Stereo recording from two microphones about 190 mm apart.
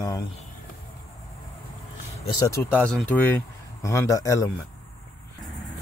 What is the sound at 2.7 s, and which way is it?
Speech, 5° left (ahead or behind).